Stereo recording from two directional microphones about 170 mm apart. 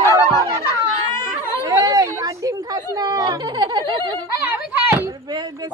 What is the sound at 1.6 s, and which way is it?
Chatter, 20° right (ahead or behind).